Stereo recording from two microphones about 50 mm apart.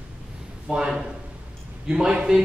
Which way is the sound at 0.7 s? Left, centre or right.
Centre.